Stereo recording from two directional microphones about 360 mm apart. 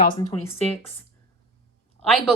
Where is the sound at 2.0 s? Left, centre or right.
Centre.